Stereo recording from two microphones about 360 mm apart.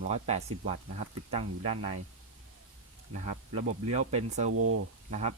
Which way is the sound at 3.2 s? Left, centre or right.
Centre.